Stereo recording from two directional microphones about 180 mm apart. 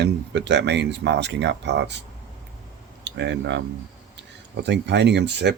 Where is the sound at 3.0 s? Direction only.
75° right (ahead or behind).